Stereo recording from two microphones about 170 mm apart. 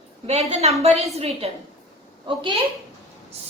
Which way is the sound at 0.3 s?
35° right (ahead or behind).